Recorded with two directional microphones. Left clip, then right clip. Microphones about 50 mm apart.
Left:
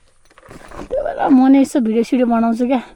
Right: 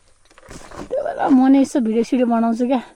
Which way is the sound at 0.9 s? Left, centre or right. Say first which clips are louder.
Left 2 dB; left.